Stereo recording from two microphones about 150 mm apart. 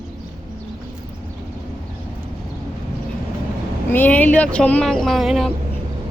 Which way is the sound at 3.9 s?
10° left (ahead or behind).